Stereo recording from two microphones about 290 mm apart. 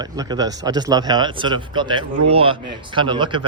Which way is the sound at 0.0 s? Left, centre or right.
Centre.